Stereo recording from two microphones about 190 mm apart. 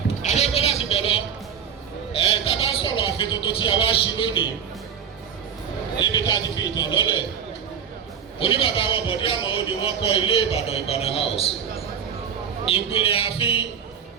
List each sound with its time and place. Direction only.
0.2 s a sound: 35° left (ahead or behind)
2.5 s speech: 25° left (ahead or behind)
6.0 s a man's voice: 25° left (ahead or behind)
8.4 s a man's voice: 30° left (ahead or behind)
12.7 s a man's voice: 30° left (ahead or behind)